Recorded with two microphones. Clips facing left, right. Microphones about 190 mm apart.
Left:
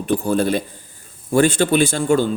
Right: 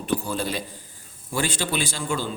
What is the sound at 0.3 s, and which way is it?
A man's voice, 55° left (ahead or behind).